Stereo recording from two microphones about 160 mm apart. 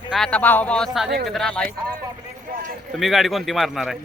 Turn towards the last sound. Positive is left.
turn(degrees=0)  # may be behind; listen again after turning